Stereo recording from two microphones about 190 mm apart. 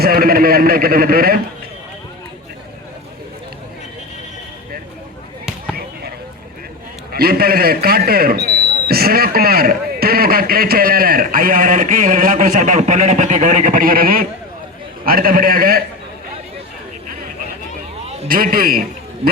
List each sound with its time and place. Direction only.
0.0 s a sound: 50° right (ahead or behind)
5.7 s basketball bounce: 55° right (ahead or behind)
7.1 s a man's voice: 55° right (ahead or behind)
18.3 s a man's voice: 50° right (ahead or behind)